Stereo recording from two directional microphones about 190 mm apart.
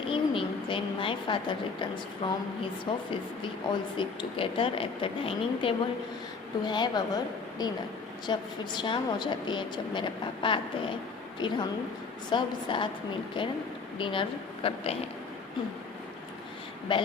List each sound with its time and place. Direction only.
0.1 s a woman's voice: 25° left (ahead or behind)
14.0 s a woman's voice: 25° left (ahead or behind)
16.9 s a woman's voice: 25° left (ahead or behind)